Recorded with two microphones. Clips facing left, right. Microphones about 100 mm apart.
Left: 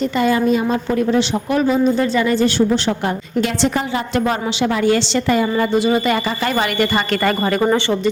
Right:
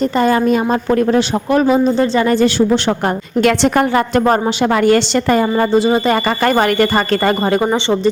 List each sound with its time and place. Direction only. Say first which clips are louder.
0.2 s a woman's voice: right 2 dB; 45° right (ahead or behind)
1.8 s speech: right 2 dB; 35° right (ahead or behind)
2.3 s a woman's voice: right 3 dB; 80° right
3.4 s a woman's voice: right 8 dB; 60° right (ahead or behind); by 6.1 s 35° right (ahead or behind)
6.2 s a woman's voice: right 6 dB; 50° right (ahead or behind)
7.3 s speech: right 2 dB; 30° right (ahead or behind)